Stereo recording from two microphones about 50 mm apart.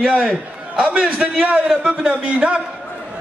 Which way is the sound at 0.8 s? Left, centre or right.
Centre.